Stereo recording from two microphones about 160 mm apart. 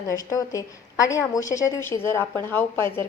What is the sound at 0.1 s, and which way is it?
A woman's voice, 20° left (ahead or behind).